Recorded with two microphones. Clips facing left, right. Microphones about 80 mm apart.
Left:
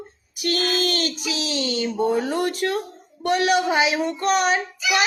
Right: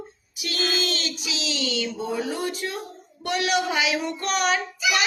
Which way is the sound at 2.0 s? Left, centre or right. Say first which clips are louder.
Left 6 dB; left.